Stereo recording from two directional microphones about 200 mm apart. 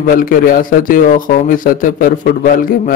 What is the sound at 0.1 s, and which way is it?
Speech, 45° left (ahead or behind).